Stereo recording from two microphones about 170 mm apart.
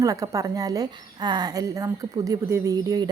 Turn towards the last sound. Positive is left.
turn(degrees=-20)  # may be behind; listen again after turning